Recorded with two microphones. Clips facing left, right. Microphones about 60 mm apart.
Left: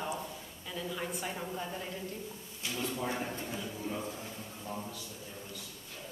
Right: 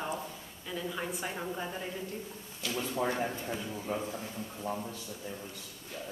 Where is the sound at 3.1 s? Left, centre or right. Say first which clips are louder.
Right 3 dB; right.